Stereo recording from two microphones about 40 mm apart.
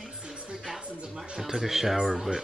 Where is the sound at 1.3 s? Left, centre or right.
Centre.